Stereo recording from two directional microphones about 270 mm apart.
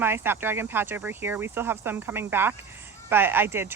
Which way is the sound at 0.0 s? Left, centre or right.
Centre.